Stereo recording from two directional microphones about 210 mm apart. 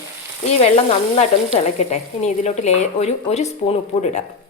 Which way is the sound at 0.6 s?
30° left (ahead or behind).